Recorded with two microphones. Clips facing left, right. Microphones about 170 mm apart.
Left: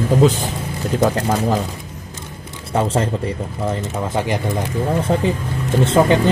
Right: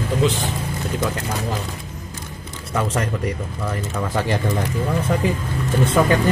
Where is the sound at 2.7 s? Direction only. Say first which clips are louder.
Left 4 dB; 30° left (ahead or behind).